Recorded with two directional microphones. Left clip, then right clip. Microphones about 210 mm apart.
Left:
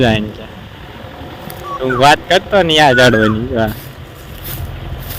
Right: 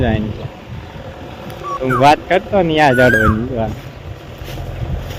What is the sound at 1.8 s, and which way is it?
Speech, 15° left (ahead or behind).